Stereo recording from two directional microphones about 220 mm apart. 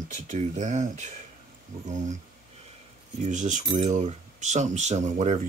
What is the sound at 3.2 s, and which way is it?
Coin, 35° right (ahead or behind).